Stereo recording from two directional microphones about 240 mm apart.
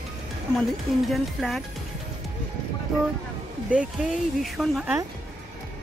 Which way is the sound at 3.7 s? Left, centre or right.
Centre.